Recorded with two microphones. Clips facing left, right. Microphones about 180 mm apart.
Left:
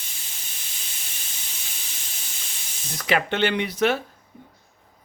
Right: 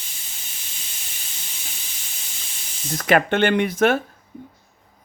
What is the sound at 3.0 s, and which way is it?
Speech, 50° right (ahead or behind).